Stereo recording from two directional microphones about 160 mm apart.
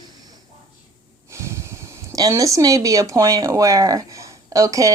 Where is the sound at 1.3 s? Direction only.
15° right (ahead or behind).